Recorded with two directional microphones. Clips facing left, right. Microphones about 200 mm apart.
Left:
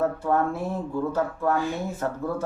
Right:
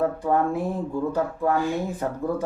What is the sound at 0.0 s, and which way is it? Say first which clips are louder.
Speech: right 1 dB; 15° right (ahead or behind).